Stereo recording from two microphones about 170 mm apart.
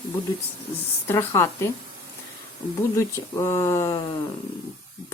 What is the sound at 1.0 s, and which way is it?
Speech, 15° left (ahead or behind).